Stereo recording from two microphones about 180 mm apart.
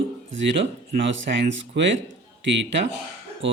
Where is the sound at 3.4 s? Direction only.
90° right.